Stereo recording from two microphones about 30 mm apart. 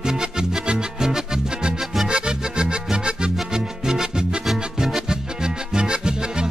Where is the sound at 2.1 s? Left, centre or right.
Right.